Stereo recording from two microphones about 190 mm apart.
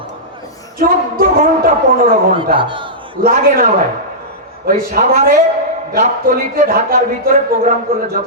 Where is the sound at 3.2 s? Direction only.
50° right (ahead or behind).